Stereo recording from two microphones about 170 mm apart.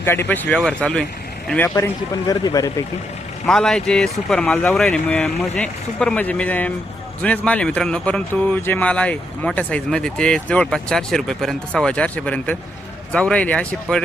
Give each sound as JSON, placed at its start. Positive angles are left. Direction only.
{"t": 0.0, "sound": "speech", "side_deg": 15}
{"t": 3.4, "sound": "speech", "side_deg": 5}